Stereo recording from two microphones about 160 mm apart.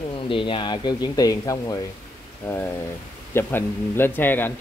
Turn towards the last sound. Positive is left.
turn(degrees=10)  # may be behind; listen again after turning